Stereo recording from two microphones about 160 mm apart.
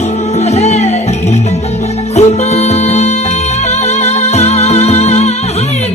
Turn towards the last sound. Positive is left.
turn(degrees=45)  # may be behind; listen again after turning